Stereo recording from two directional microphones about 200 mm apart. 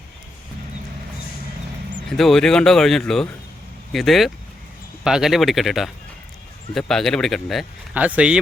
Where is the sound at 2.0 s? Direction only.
Centre (ahead or behind).